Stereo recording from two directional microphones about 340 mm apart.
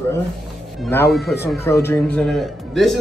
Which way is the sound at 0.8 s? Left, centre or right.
Centre.